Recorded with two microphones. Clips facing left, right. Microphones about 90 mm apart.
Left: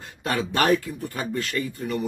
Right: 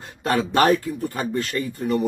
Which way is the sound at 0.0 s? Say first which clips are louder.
Right 4 dB; 40° right (ahead or behind).